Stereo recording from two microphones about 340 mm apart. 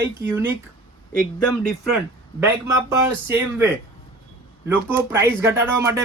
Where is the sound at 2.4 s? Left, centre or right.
Centre.